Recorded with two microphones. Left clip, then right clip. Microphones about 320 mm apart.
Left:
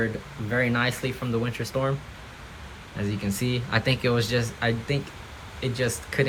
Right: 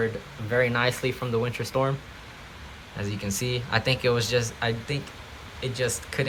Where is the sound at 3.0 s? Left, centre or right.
Centre.